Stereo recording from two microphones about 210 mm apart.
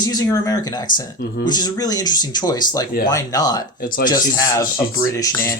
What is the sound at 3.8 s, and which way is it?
Speech, 45° left (ahead or behind).